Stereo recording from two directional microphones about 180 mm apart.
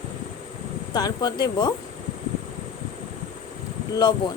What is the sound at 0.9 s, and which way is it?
Speech, 20° left (ahead or behind).